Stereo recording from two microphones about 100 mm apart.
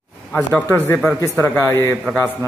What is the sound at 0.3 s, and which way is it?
Speech, 15° left (ahead or behind).